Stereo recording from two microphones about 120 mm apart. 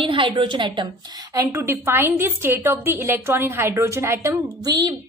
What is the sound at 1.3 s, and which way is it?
A woman's voice, 20° right (ahead or behind).